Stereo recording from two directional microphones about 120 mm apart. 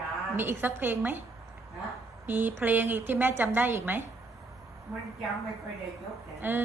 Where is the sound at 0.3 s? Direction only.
15° right (ahead or behind).